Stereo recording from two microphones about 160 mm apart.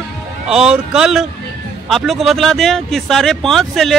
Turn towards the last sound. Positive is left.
turn(degrees=0)  # may be behind; listen again after turning